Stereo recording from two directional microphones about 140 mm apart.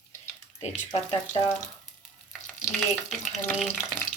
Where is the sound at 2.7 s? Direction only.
Centre (ahead or behind).